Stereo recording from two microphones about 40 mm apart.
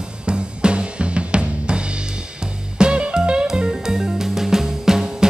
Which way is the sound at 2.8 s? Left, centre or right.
Right.